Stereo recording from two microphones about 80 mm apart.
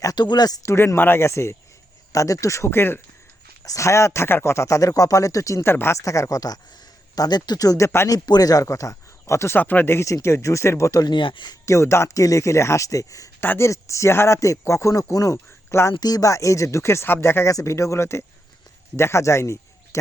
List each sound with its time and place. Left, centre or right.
0.0 s speech: left
0.6 s speech: left
2.6 s speech: left
3.6 s speech: left
5.6 s speech: left
6.0 s speech: left
7.2 s speech: left
9.6 s speech: left
11.0 s speech: left
11.6 s speech: left
13.4 s speech: left
15.7 s speech: left
16.0 s speech: left